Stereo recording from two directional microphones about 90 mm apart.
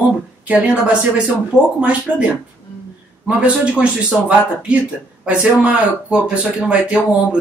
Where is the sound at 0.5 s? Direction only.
15° right (ahead or behind).